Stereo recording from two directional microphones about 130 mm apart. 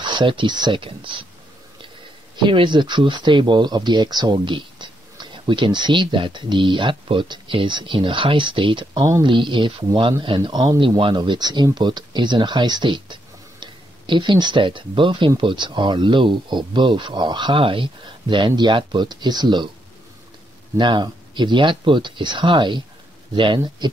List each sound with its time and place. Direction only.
0.0 s speech: 35° right (ahead or behind)
2.3 s speech: 40° right (ahead or behind)
20.7 s speech: 35° right (ahead or behind)